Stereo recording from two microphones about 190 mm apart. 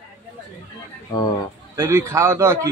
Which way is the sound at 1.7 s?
15° right (ahead or behind).